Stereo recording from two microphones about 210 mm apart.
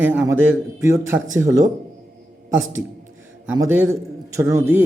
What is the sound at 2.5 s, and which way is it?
Speech, 65° right (ahead or behind).